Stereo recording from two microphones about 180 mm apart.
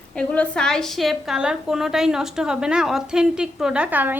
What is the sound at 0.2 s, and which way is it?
A woman's voice, 5° left (ahead or behind).